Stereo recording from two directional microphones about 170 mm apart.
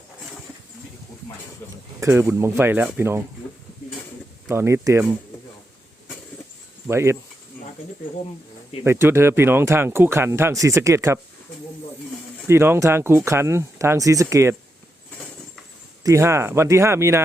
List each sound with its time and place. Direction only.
2.0 s speech: 15° right (ahead or behind)
4.4 s speech: 15° right (ahead or behind)
6.8 s speech: 15° right (ahead or behind)
8.8 s speech: 15° right (ahead or behind)
12.5 s speech: 15° right (ahead or behind)
16.0 s speech: 15° right (ahead or behind)